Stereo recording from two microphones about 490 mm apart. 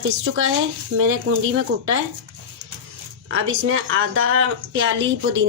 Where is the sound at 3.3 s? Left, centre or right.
Right.